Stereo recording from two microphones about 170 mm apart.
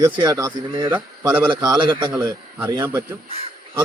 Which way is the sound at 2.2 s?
15° right (ahead or behind).